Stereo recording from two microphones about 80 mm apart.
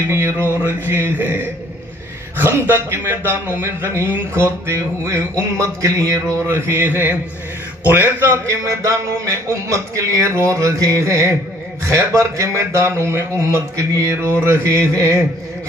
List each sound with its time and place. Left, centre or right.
0.1 s speech: right